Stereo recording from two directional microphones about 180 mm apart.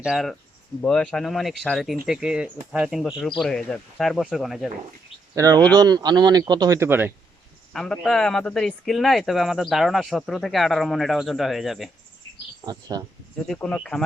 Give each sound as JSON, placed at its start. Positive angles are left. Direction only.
{"t": 0.0, "sound": "speech", "side_deg": 0}
{"t": 5.3, "sound": "speech", "side_deg": -20}
{"t": 7.7, "sound": "speech", "side_deg": 0}
{"t": 12.9, "sound": "speech", "side_deg": -20}
{"t": 13.5, "sound": "speech", "side_deg": 5}